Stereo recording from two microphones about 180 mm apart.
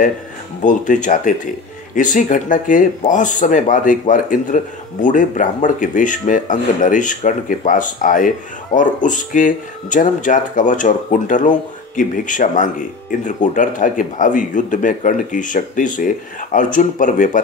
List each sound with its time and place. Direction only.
0.6 s speech: 45° left (ahead or behind)